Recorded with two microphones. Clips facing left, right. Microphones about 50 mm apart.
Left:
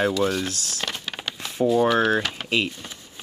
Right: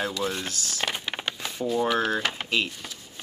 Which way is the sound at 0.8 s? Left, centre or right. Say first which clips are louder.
Right 2 dB; centre.